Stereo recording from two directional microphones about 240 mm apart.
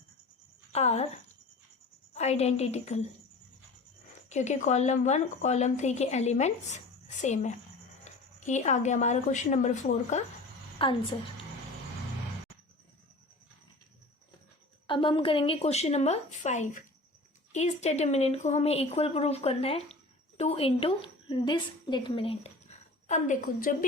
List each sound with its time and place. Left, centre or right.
0.7 s a woman's voice: left
2.1 s speech: left
4.3 s a woman's voice: left
14.8 s a woman's voice: left